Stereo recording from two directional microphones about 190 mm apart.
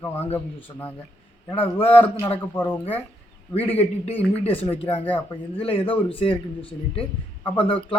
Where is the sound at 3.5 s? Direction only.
30° left (ahead or behind).